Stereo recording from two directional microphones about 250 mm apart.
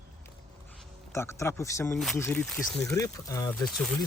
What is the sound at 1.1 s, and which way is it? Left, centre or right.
Speech, centre.